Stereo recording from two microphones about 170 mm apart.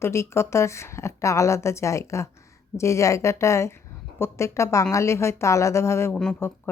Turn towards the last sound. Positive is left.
turn(degrees=10)  # may be behind; listen again after turning